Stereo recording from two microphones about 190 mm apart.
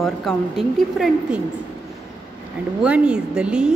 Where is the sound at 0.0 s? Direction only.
Centre (ahead or behind).